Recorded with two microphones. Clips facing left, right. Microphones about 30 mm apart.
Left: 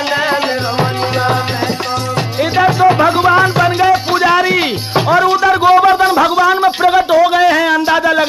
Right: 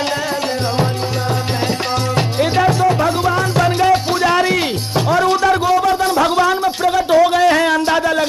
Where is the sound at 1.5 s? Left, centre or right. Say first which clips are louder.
Left 1 dB; centre; by 3.6 s left.